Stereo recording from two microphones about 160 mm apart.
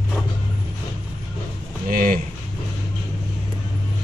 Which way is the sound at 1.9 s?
60° right (ahead or behind).